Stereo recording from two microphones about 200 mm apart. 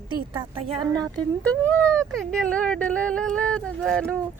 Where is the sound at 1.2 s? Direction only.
5° left (ahead or behind).